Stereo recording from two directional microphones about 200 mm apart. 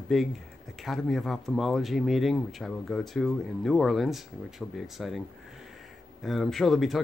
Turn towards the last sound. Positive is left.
turn(degrees=0)  # may be behind; listen again after turning